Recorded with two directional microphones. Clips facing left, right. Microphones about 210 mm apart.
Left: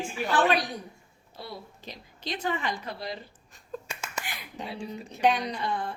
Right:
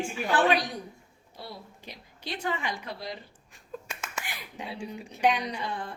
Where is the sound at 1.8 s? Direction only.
10° right (ahead or behind).